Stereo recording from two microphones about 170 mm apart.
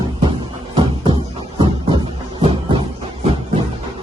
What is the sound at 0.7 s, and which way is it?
Music, 30° right (ahead or behind).